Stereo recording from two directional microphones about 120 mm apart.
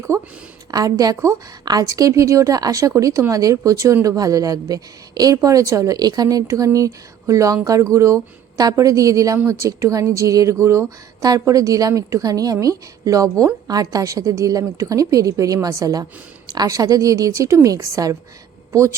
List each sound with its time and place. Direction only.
0.1 s a woman's voice: 25° right (ahead or behind)